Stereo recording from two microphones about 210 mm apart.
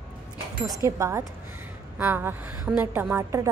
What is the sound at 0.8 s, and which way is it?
A woman's voice, 15° right (ahead or behind).